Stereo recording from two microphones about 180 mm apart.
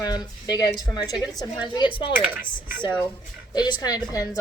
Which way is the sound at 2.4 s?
50° left (ahead or behind).